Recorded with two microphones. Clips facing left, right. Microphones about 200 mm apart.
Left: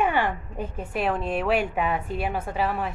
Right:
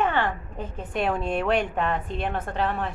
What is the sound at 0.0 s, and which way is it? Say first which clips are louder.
A woman's voice: left 1 dB; 10° left (ahead or behind).